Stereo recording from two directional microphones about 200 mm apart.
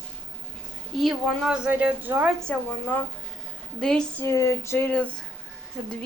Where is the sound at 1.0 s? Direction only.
Centre (ahead or behind).